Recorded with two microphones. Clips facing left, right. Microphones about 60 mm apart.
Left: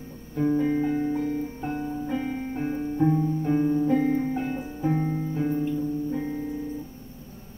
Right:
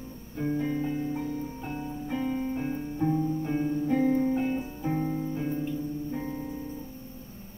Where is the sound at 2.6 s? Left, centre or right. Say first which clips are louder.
Left 5 dB; centre.